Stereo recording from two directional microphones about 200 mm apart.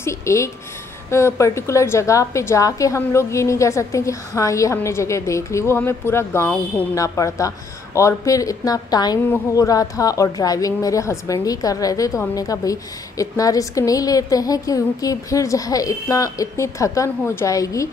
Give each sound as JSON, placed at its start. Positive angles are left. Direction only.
{"t": 0.0, "sound": "a woman's voice", "side_deg": 15}